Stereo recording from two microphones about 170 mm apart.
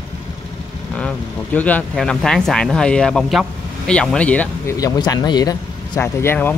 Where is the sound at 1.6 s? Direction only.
10° left (ahead or behind).